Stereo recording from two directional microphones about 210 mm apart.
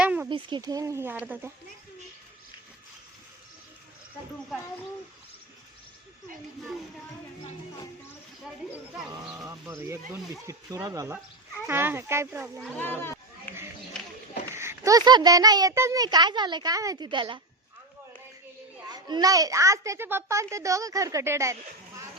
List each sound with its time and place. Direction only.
0.0 s a sound: 5° right (ahead or behind)
0.3 s a child's voice: 20° right (ahead or behind)
9.0 s a child's voice: 5° right (ahead or behind)
14.5 s a child's voice: 10° right (ahead or behind)
18.9 s a child's voice: 20° right (ahead or behind)